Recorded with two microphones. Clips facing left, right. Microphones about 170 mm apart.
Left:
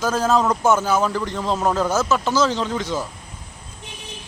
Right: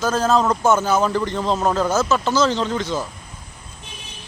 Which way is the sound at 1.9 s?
15° left (ahead or behind).